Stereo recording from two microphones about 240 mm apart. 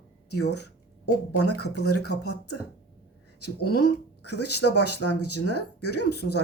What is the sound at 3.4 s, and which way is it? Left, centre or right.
Speech, left.